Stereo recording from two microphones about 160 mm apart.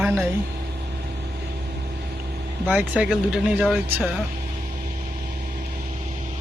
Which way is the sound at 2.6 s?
10° right (ahead or behind).